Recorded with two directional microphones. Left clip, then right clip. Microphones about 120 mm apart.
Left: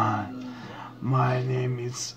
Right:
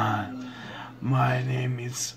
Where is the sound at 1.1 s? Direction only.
25° right (ahead or behind).